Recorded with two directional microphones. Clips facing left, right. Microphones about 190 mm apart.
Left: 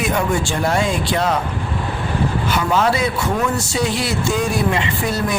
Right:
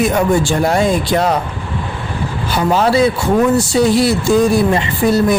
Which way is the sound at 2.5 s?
35° right (ahead or behind).